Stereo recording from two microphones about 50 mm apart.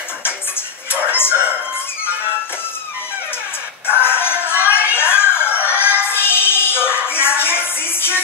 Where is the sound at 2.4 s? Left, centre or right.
Left.